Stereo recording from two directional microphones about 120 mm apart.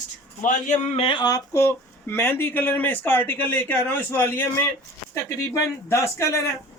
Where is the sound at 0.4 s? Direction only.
80° left.